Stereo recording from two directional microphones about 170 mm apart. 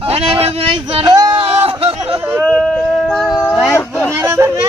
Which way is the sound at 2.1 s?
10° right (ahead or behind).